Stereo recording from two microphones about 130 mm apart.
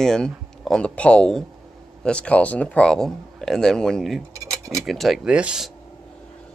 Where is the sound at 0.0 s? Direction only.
5° left (ahead or behind).